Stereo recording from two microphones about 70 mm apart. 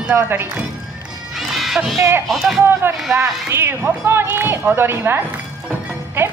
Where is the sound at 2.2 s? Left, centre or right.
Centre.